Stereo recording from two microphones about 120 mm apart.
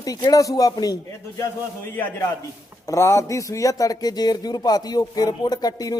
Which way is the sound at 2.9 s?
25° left (ahead or behind).